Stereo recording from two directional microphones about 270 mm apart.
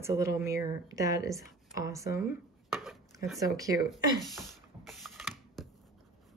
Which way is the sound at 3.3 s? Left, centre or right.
Centre.